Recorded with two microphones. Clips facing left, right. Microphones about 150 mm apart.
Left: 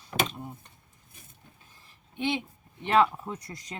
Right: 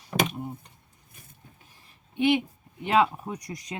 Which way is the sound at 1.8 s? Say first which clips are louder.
Right 7 dB; 15° right (ahead or behind).